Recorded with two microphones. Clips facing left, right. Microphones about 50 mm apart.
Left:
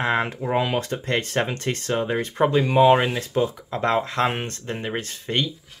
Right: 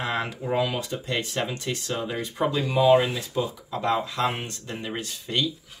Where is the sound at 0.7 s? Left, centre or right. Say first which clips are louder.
Left 5 dB; left.